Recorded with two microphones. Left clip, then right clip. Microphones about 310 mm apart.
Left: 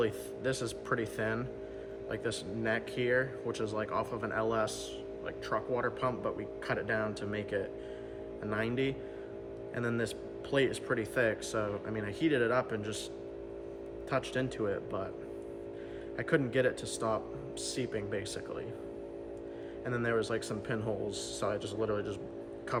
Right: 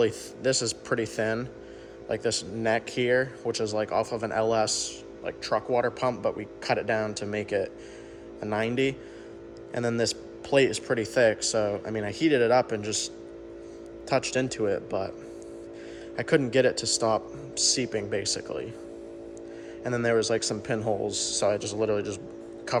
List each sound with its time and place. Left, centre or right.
0.0 s speech: centre
14.1 s speech: centre
16.1 s speech: centre
19.8 s speech: centre